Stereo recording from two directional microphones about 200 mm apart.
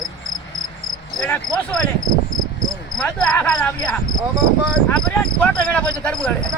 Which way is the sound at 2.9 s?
5° left (ahead or behind).